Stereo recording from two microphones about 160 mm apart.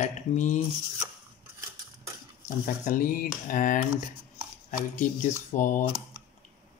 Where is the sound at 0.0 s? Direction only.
50° left (ahead or behind).